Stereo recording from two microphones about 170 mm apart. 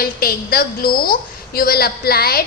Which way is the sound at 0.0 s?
60° left (ahead or behind).